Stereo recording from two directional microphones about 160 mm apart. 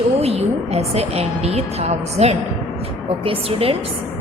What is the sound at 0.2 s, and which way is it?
A woman's voice, 40° right (ahead or behind).